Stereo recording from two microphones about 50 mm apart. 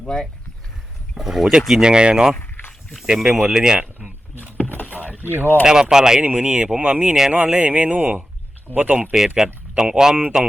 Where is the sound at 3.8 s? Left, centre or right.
Right.